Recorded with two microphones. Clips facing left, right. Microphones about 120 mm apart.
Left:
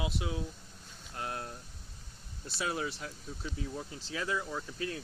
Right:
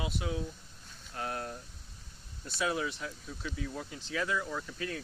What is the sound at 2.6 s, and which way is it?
Speech, 30° left (ahead or behind).